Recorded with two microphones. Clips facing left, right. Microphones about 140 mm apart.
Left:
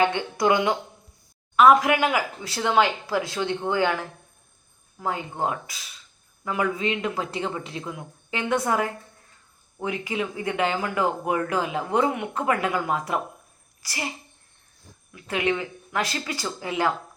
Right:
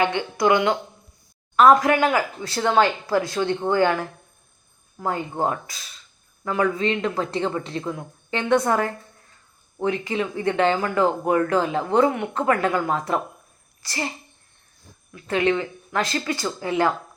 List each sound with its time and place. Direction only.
0.2 s speech: 20° left (ahead or behind)
1.5 s speech: 5° left (ahead or behind)
5.5 s speech: 5° left (ahead or behind)
15.1 s speech: 15° left (ahead or behind)